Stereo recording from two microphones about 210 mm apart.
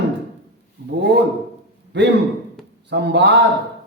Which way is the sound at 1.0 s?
50° right (ahead or behind).